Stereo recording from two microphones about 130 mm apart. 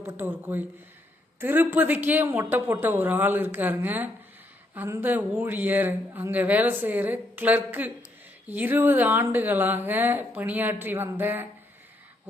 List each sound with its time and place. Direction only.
0.2 s a man's voice: 15° right (ahead or behind)